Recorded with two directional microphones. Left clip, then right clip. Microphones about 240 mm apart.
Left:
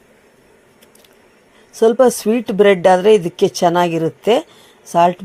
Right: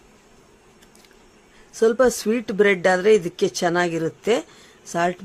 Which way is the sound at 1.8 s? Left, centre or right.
Centre.